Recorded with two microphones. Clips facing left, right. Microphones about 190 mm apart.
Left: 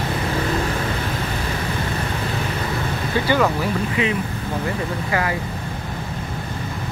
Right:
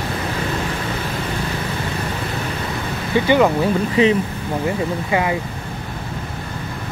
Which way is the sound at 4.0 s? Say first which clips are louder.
Right 8 dB; 35° right (ahead or behind).